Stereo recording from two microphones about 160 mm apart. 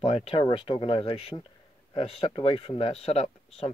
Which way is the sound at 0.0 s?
40° left (ahead or behind).